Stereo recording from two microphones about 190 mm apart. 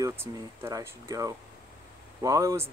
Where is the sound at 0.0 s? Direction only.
15° right (ahead or behind).